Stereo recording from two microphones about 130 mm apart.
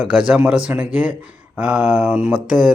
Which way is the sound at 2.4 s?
5° right (ahead or behind).